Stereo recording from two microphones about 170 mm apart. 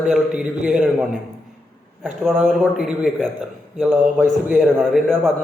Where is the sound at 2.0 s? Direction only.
Centre (ahead or behind).